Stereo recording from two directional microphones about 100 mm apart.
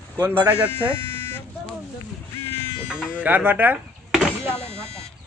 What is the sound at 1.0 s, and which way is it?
Buzzer, 25° left (ahead or behind).